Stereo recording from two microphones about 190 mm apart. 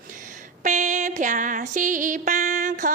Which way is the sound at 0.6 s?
40° right (ahead or behind).